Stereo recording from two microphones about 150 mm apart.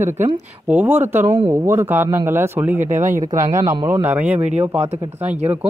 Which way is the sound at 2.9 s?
55° right (ahead or behind).